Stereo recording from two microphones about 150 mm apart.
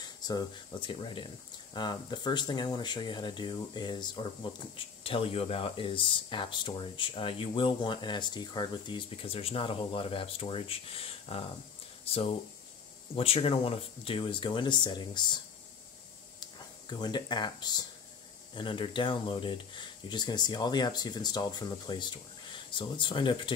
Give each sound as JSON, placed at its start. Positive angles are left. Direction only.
{"t": 0.0, "sound": "speech", "side_deg": 30}